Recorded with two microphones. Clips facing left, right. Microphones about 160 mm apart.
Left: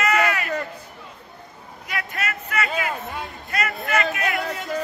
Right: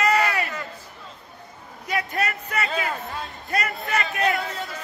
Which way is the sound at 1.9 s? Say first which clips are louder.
Right 4 dB; 25° right (ahead or behind).